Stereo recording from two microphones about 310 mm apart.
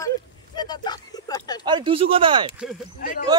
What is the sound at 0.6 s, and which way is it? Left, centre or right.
Speech, centre.